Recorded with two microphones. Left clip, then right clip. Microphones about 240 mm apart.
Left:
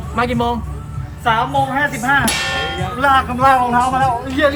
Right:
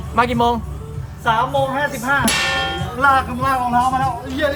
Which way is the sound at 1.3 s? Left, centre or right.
Right.